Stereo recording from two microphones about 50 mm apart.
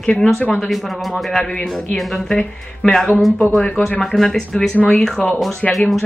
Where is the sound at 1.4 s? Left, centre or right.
Centre.